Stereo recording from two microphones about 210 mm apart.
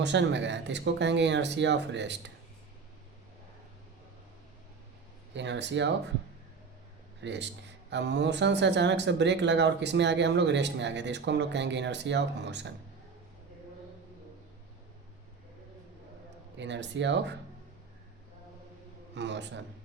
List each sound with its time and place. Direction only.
0.0 s speech: 60° right (ahead or behind)
5.3 s speech: 55° right (ahead or behind)
7.2 s speech: 55° right (ahead or behind)
16.6 s speech: 55° right (ahead or behind)
19.1 s speech: 55° right (ahead or behind)